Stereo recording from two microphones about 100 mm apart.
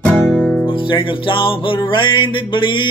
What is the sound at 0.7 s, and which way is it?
Music, 60° left (ahead or behind).